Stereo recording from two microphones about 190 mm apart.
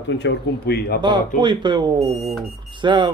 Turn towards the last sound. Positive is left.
turn(degrees=-25)  # may be behind; listen again after turning